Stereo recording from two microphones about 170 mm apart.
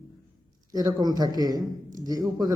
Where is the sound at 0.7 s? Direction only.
20° right (ahead or behind).